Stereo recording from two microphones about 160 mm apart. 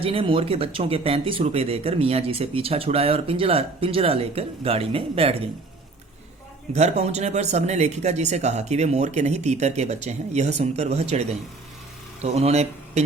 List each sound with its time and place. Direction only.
0.0 s speech: 35° right (ahead or behind)
6.7 s speech: 45° right (ahead or behind)